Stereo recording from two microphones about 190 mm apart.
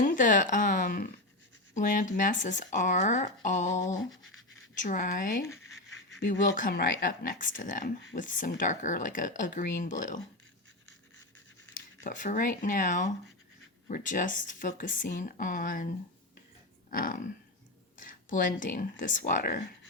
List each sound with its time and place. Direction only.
0.0 s speech: 45° left (ahead or behind)
5.4 s scratch: 15° left (ahead or behind)
6.6 s speech: 50° left (ahead or behind)
11.7 s speech: 40° left (ahead or behind)
16.9 s speech: 45° left (ahead or behind)